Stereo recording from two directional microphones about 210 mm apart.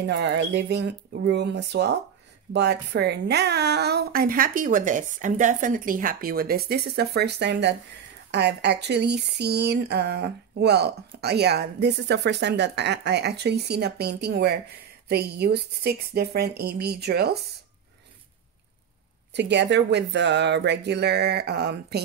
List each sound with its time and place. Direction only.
0.0 s speech: 55° right (ahead or behind)
19.3 s speech: 55° right (ahead or behind)